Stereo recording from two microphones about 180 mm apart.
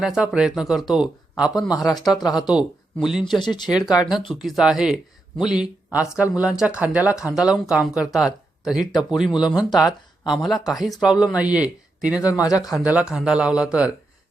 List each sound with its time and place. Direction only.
0.0 s speech: 5° right (ahead or behind)
1.5 s speech: 20° left (ahead or behind)
2.5 s speech: 5° right (ahead or behind)
3.3 s speech: 25° left (ahead or behind)
4.3 s speech: centre (ahead or behind)
12.3 s speech: 20° left (ahead or behind)
12.7 s speech: 5° right (ahead or behind)